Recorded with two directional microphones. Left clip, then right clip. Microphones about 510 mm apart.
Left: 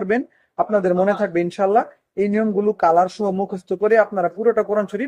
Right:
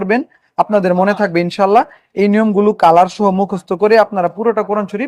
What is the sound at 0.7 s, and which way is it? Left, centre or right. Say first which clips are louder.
Speech: right 3 dB; centre.